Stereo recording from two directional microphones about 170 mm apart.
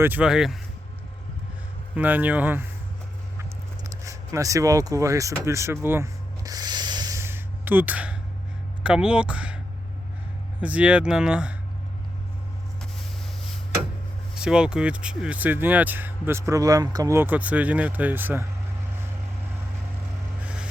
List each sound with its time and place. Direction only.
0.0 s speech: 10° right (ahead or behind)
2.0 s speech: 10° right (ahead or behind)
3.8 s speech: 20° right (ahead or behind)
5.4 s a sound: 15° right (ahead or behind)
8.8 s speech: 5° right (ahead or behind)
10.6 s speech: 5° right (ahead or behind)
14.3 s speech: 5° right (ahead or behind)